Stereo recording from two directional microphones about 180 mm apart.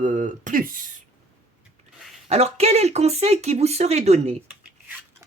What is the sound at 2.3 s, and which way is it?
Speech, 35° right (ahead or behind).